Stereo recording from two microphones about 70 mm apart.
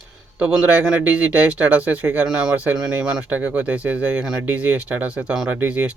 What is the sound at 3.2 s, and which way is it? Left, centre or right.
Speech, right.